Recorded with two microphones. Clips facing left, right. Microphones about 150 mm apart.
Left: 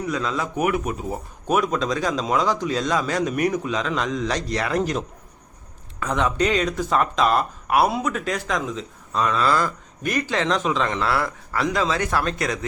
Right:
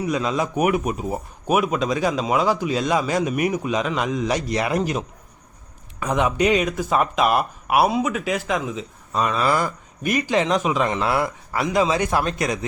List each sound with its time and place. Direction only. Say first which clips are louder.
0.0 s speech: right 3 dB; 15° right (ahead or behind)